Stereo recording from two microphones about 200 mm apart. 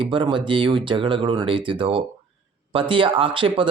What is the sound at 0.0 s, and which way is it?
Speech, 25° right (ahead or behind).